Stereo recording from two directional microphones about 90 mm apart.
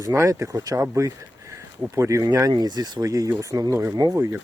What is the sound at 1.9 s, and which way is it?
Speech, 35° right (ahead or behind).